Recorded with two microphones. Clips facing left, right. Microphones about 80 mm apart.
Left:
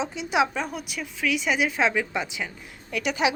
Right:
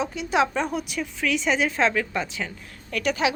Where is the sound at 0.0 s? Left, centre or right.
Left.